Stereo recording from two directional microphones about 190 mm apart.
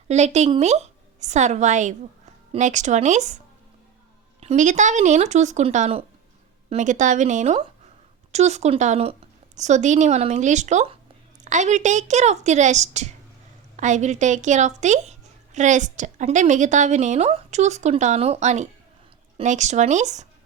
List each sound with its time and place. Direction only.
0.1 s a woman's voice: 35° right (ahead or behind)